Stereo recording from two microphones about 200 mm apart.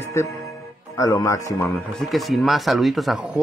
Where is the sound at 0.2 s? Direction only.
15° left (ahead or behind).